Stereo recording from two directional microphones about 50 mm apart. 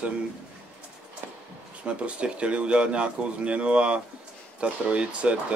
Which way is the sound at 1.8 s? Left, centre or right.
Right.